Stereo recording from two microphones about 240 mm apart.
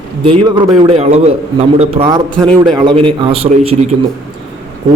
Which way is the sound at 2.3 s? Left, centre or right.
Centre.